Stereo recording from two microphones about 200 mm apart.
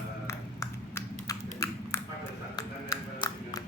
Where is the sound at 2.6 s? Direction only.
20° left (ahead or behind).